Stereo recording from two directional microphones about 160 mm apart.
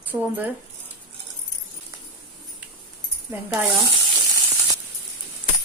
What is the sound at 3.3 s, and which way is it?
Speech, 10° right (ahead or behind).